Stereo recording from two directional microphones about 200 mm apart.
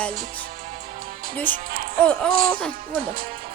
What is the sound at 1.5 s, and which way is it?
Music, 10° left (ahead or behind).